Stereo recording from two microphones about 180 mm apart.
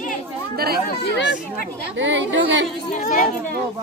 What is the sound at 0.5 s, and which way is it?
Speech, 60° right (ahead or behind).